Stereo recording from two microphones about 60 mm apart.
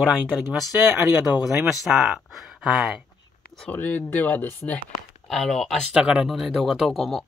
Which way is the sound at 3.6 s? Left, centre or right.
Left.